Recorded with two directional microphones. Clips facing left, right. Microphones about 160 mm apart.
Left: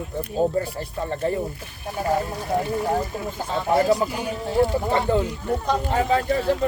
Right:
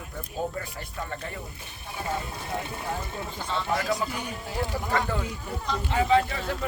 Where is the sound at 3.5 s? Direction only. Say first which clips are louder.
Left 8 dB; 40° left (ahead or behind).